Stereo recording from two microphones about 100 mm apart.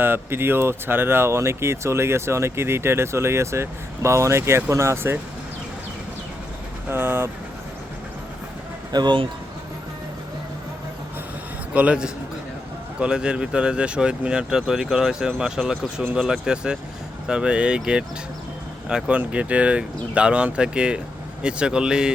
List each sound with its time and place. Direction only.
0.0 s speech: 20° right (ahead or behind)
6.8 s vehicle: 20° right (ahead or behind)
8.9 s speech: 45° right (ahead or behind)
11.7 s speech: 10° right (ahead or behind)